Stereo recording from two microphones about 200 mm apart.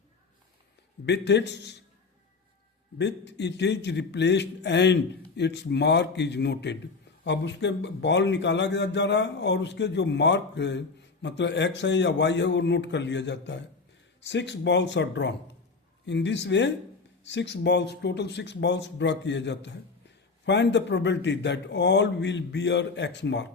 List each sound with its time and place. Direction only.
1.0 s a man's voice: 60° left (ahead or behind)
3.0 s a man's voice: 60° left (ahead or behind)